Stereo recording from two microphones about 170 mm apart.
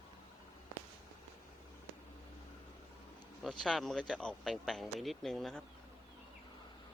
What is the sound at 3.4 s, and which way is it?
Speech, centre (ahead or behind).